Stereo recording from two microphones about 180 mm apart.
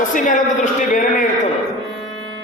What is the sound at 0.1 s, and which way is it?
A man's voice, 45° left (ahead or behind).